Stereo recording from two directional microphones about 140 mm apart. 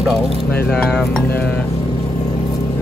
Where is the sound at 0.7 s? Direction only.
5° left (ahead or behind).